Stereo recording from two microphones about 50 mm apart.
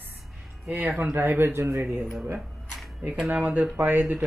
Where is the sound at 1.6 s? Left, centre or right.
Right.